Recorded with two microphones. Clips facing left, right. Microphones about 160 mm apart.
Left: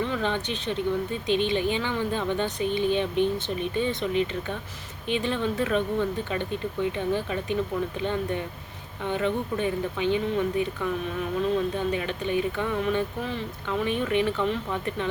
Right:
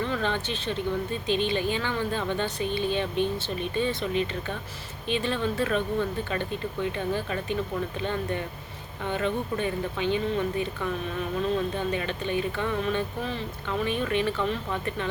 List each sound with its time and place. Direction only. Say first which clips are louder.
0.0 s speech: left 1 dB; 15° left (ahead or behind)
11.9 s speech: left 1 dB; 10° left (ahead or behind)